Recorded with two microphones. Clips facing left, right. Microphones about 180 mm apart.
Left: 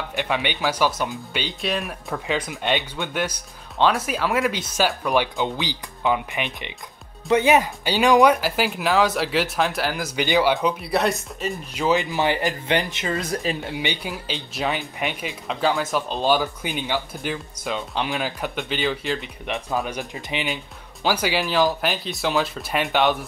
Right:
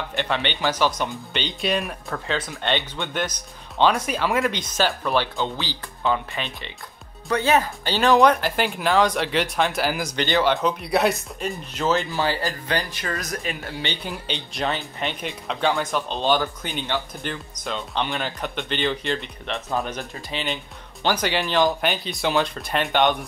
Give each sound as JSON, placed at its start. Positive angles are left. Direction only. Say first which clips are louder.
{"t": 0.1, "sound": "speech", "louder": "left 1 dB", "side_deg": 10}
{"t": 10.1, "sound": "speech", "louder": "left 2 dB", "side_deg": 10}
{"t": 11.8, "sound": "speech", "louder": "left 2 dB", "side_deg": 15}
{"t": 13.7, "sound": "speech", "louder": "left 2 dB", "side_deg": 15}
{"t": 20.0, "sound": "speech", "louder": "left 2 dB", "side_deg": 15}